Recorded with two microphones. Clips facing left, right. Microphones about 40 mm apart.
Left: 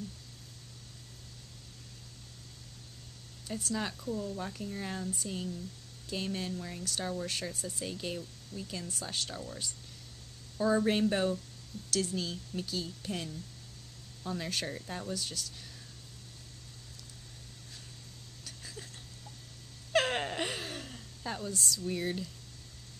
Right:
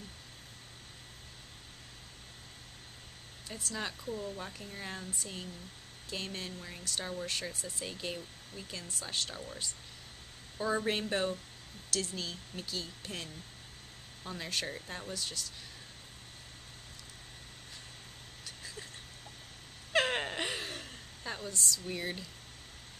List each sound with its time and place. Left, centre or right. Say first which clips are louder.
3.5 s speech: left 4 dB; centre
4.1 s speech: left 4 dB; right
4.4 s speech: left 4 dB; centre
18.4 s vehicle: even; centre
19.9 s a sound: left 1 dB; centre
21.5 s speech: right 1 dB; centre
21.8 s speech: left 4 dB; centre